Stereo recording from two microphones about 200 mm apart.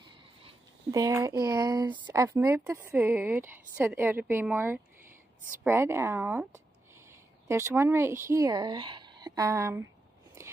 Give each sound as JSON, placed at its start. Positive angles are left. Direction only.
{"t": 0.0, "sound": "a sound", "side_deg": -25}
{"t": 1.9, "sound": "speech", "side_deg": -10}
{"t": 10.4, "sound": "biting", "side_deg": -15}